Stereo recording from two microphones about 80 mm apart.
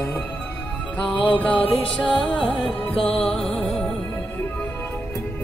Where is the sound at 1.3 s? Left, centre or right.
Centre.